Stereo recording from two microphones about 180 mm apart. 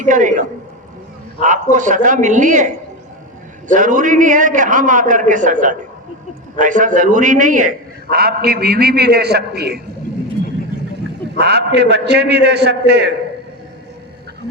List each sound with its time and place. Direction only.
0.0 s a man's voice: 45° right (ahead or behind)
8.1 s a man's voice: 60° right (ahead or behind)
11.3 s a man's voice: 65° right (ahead or behind)